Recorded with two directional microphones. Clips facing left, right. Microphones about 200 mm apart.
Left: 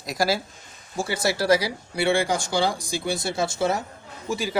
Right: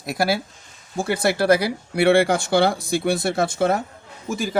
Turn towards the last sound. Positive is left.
turn(degrees=-50)  # may be behind; listen again after turning